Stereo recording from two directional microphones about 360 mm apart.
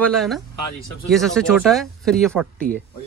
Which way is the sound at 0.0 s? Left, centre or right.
Centre.